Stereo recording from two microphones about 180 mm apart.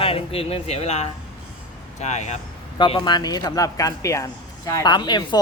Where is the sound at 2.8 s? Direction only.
25° left (ahead or behind).